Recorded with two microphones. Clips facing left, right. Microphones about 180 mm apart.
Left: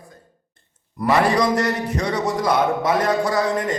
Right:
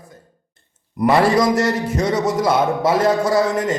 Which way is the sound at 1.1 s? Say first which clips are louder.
Right 3 dB; 25° right (ahead or behind).